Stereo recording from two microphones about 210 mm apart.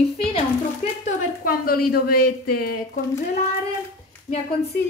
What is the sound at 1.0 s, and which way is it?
Speech, 40° left (ahead or behind).